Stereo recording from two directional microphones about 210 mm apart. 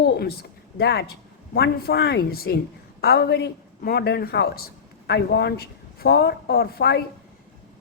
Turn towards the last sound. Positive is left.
turn(degrees=45)  # may be behind; listen again after turning